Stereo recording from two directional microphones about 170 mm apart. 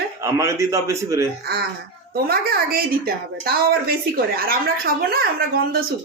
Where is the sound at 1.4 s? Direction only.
65° right (ahead or behind).